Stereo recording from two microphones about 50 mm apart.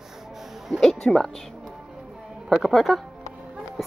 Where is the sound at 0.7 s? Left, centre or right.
Centre.